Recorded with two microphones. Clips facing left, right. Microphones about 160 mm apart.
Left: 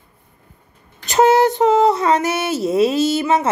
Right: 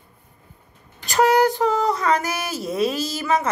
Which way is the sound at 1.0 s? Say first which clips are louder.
Left 4 dB; 25° left (ahead or behind).